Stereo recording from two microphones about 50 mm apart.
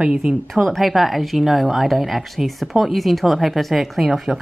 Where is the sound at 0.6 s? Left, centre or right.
Centre.